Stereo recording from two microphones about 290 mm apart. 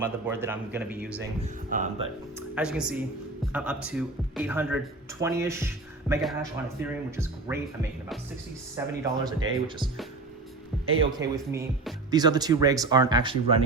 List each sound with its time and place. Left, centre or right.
0.0 s speech: centre
1.4 s speech: right
2.6 s a man's voice: centre
11.2 s speech: centre